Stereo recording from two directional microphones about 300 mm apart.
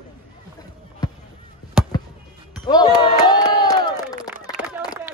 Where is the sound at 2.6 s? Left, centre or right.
Centre.